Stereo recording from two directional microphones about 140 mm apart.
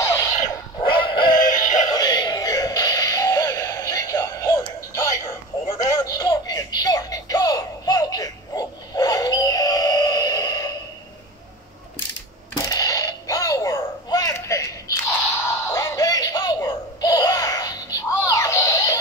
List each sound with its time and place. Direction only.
0.0 s dog: 20° left (ahead or behind)
0.8 s synthetic singing: 35° left (ahead or behind)
1.4 s synthetic singing: 65° left (ahead or behind)
1.9 s music: 30° left (ahead or behind)
12.6 s a sound: 25° left (ahead or behind)
15.6 s music: 20° left (ahead or behind)